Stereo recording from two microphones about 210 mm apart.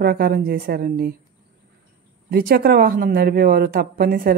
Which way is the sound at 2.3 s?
45° right (ahead or behind).